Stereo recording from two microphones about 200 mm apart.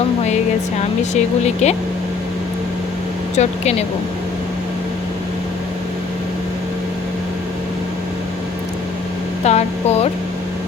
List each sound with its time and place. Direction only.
1.6 s speech: 35° left (ahead or behind)
3.3 s speech: 35° left (ahead or behind)
9.4 s speech: 30° left (ahead or behind)